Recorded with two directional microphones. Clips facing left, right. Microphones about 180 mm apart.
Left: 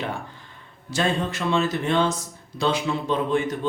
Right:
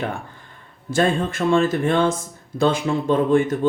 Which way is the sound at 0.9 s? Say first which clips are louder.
Right 5 dB; 50° right (ahead or behind).